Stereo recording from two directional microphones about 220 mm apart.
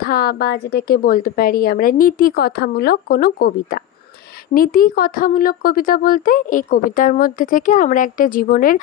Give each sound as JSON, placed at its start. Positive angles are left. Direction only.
{"t": 0.0, "sound": "a woman's voice", "side_deg": 40}